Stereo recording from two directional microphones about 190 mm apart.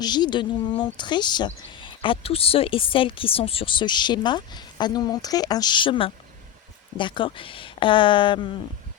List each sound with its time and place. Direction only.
0.0 s a woman's voice: 20° left (ahead or behind)